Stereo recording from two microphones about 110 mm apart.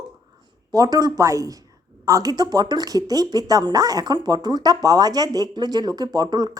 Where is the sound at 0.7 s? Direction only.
35° right (ahead or behind).